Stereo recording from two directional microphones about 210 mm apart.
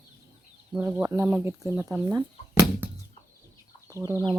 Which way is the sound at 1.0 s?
15° right (ahead or behind).